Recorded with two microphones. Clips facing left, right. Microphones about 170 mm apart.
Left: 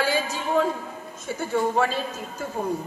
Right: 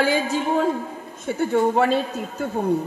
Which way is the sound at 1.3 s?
55° right (ahead or behind).